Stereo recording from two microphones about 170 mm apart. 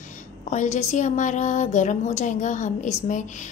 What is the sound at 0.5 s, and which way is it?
A woman's voice, 45° left (ahead or behind).